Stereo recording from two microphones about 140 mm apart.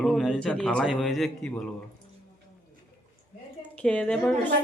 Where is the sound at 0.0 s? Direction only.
Centre (ahead or behind).